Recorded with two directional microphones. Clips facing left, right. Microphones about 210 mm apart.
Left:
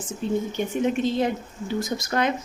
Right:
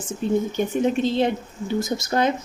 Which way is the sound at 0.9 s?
30° right (ahead or behind).